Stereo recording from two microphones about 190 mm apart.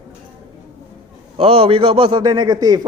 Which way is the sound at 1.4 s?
30° right (ahead or behind).